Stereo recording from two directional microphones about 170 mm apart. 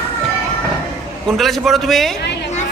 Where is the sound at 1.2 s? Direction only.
Centre (ahead or behind).